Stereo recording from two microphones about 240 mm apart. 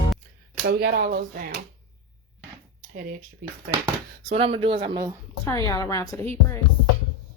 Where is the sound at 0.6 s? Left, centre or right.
Right.